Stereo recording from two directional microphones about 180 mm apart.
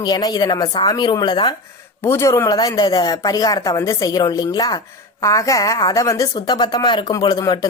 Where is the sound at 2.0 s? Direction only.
15° left (ahead or behind).